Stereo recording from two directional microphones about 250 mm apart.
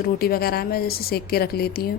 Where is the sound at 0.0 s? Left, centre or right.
Left.